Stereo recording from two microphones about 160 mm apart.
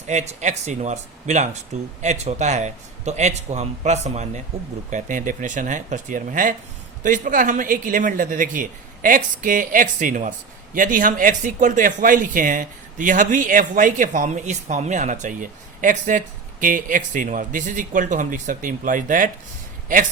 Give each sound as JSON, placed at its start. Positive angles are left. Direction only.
{"t": 0.1, "sound": "a man's voice", "side_deg": -45}